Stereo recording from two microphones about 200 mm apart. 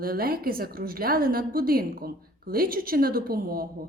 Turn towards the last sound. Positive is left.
turn(degrees=-45)  # may be behind; listen again after turning